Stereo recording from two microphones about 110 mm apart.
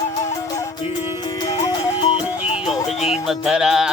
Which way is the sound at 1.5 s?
35° left (ahead or behind).